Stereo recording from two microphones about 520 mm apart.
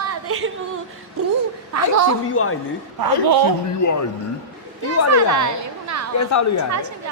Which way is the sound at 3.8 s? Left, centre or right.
Left.